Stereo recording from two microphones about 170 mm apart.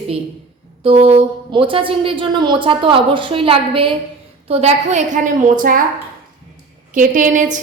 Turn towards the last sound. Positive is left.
turn(degrees=-50)  # may be behind; listen again after turning